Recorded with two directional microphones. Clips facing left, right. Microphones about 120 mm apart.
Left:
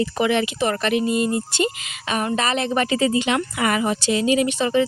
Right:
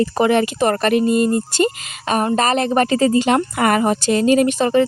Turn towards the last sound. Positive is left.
turn(degrees=-50)  # may be behind; listen again after turning